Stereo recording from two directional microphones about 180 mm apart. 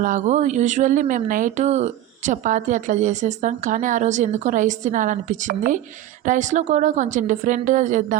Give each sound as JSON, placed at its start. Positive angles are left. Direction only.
{"t": 0.0, "sound": "speech", "side_deg": -45}